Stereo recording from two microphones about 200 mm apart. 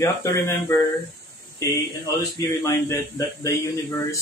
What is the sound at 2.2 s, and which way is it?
Speech, 15° left (ahead or behind).